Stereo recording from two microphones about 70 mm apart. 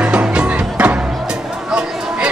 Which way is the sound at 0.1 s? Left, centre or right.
Centre.